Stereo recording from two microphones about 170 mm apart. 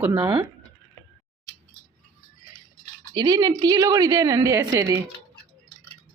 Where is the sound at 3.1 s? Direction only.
20° right (ahead or behind).